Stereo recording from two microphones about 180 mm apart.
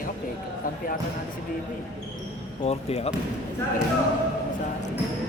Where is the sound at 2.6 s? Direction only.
35° left (ahead or behind).